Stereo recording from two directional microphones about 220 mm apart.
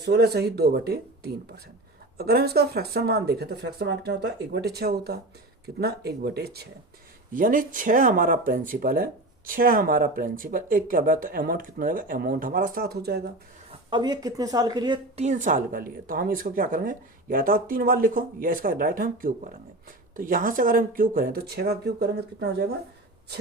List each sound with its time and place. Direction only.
0.0 s a woman's voice: 50° right (ahead or behind)
13.7 s a woman's voice: 20° right (ahead or behind); by 22.6 s 45° right (ahead or behind)